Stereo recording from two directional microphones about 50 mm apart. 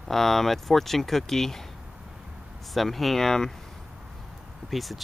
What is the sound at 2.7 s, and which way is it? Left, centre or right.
Speech, centre.